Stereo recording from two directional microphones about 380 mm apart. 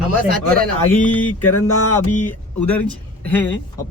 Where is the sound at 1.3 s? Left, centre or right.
Left.